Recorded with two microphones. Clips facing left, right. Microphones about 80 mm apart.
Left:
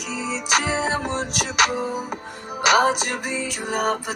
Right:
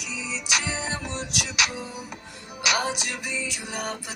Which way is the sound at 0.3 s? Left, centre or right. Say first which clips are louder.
Left 7 dB; left.